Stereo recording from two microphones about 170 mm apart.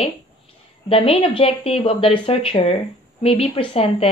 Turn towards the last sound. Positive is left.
turn(degrees=35)  # may be behind; listen again after turning